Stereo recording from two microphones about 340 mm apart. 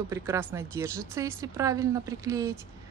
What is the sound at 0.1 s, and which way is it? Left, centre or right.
Speech, centre.